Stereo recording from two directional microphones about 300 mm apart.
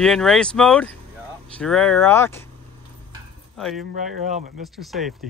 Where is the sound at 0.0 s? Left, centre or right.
Centre.